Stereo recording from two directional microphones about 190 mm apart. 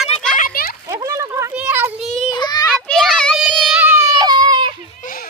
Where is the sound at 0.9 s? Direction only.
15° right (ahead or behind).